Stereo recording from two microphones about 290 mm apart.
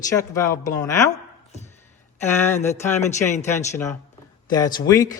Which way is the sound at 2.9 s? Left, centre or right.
Centre.